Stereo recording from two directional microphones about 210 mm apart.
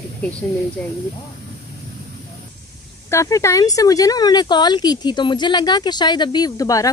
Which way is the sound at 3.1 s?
15° left (ahead or behind).